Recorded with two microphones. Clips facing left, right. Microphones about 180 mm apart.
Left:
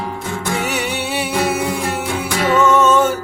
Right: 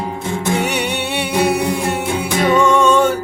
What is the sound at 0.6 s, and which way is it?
Music, centre (ahead or behind).